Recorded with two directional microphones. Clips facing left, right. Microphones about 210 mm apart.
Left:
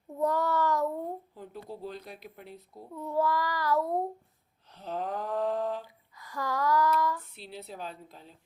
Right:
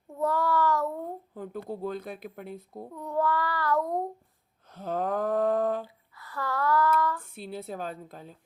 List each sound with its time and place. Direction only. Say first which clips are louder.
0.1 s child singing: right 1 dB; 20° left (ahead or behind)
1.3 s speech: right 6 dB; 50° right (ahead or behind)
2.9 s child singing: even; 5° left (ahead or behind)
4.7 s speech: right 5 dB; 50° right (ahead or behind)
5.8 s speech: right 6 dB; 15° left (ahead or behind)
7.3 s speech: right 6 dB; 50° right (ahead or behind)